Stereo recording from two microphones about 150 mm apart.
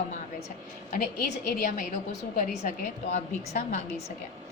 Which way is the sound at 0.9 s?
70° left (ahead or behind).